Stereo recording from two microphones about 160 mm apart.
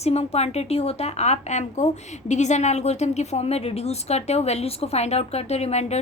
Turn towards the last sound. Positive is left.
turn(degrees=45)  # may be behind; listen again after turning